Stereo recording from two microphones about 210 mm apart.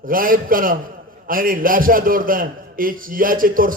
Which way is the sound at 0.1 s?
40° right (ahead or behind).